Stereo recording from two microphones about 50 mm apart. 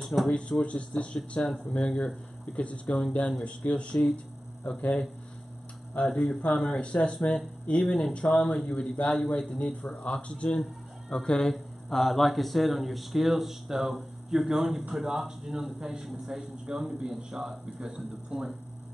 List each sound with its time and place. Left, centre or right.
0.0 s speech: centre
0.3 s speech: centre
9.0 s a man's voice: left; by 11.5 s centre
11.9 s a man's voice: centre